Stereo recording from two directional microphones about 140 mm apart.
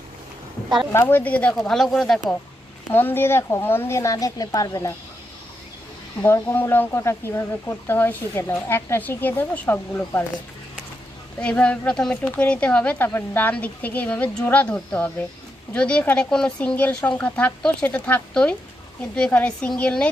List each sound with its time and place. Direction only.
0.9 s speech: 15° left (ahead or behind)
2.9 s speech: 15° left (ahead or behind)
6.2 s speech: 15° left (ahead or behind)
11.3 s speech: 10° left (ahead or behind)